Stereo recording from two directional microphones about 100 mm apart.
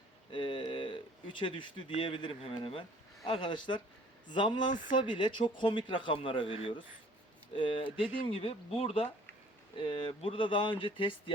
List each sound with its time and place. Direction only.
0.3 s speech: 60° left (ahead or behind); by 9.0 s 75° left (ahead or behind)
9.7 s speech: 55° left (ahead or behind)